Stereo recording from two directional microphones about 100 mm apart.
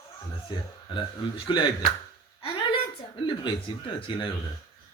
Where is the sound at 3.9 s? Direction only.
60° left (ahead or behind).